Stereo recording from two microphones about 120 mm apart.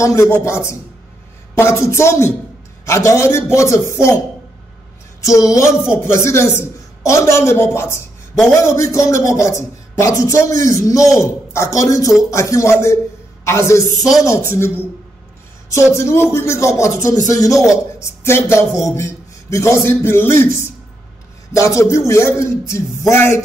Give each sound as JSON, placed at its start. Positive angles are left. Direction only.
{"t": 0.0, "sound": "a man's voice", "side_deg": 25}
{"t": 5.2, "sound": "a man's voice", "side_deg": 30}
{"t": 15.7, "sound": "a man's voice", "side_deg": 25}